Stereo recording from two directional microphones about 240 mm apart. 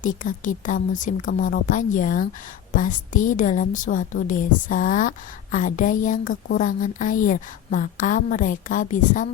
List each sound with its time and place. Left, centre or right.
0.0 s a woman's voice: left